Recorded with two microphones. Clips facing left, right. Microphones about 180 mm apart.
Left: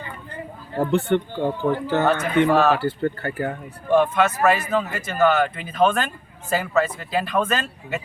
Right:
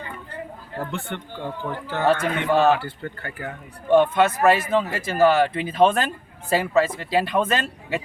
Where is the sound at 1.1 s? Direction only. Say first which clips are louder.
Left 13 dB; 35° left (ahead or behind).